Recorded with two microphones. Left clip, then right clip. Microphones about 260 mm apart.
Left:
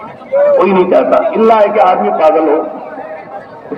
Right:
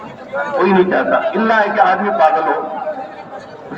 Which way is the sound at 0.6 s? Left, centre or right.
Right.